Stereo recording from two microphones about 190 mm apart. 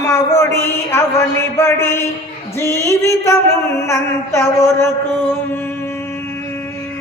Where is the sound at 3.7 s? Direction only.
15° left (ahead or behind).